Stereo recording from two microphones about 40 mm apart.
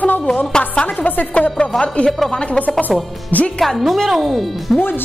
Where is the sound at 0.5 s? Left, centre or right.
Left.